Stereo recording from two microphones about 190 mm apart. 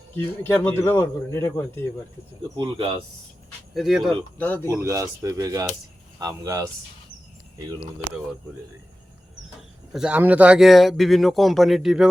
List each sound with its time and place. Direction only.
0.2 s a man's voice: 15° left (ahead or behind)
2.6 s speech: 25° right (ahead or behind)
3.8 s a man's voice: centre (ahead or behind)
4.4 s a man's voice: 10° left (ahead or behind)
4.8 s speech: 15° right (ahead or behind)
9.9 s a man's voice: 5° right (ahead or behind)